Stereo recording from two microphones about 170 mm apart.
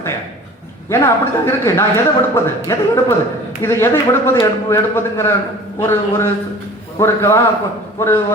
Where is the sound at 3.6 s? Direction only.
15° left (ahead or behind).